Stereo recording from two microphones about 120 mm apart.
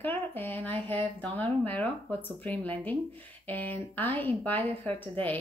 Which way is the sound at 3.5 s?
15° left (ahead or behind).